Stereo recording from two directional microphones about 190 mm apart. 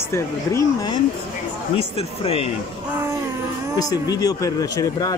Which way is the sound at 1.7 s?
30° left (ahead or behind).